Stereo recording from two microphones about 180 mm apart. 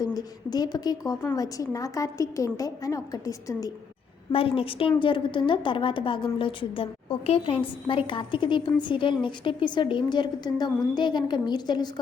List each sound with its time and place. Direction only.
0.0 s a woman's voice: 20° left (ahead or behind)
4.3 s a woman's voice: 30° left (ahead or behind)